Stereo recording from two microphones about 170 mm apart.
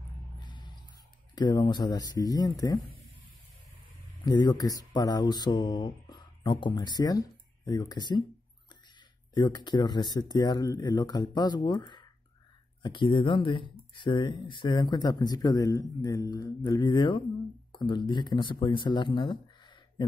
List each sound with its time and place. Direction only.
0.4 s music: 25° left (ahead or behind)
1.3 s speech: 25° left (ahead or behind)
4.2 s speech: 25° left (ahead or behind)
9.3 s speech: 25° left (ahead or behind)